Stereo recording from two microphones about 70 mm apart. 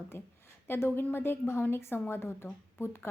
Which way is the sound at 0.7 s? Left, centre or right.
Left.